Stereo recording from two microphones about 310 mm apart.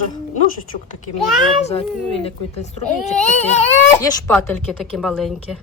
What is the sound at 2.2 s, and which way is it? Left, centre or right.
Speech, left.